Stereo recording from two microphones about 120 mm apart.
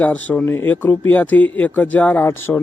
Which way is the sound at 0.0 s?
10° left (ahead or behind).